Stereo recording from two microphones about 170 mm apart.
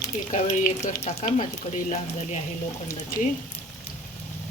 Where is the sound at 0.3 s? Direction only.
45° left (ahead or behind).